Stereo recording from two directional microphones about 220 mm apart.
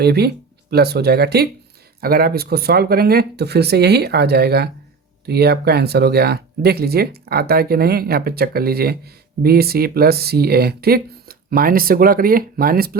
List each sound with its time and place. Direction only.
0.0 s speech: 45° right (ahead or behind)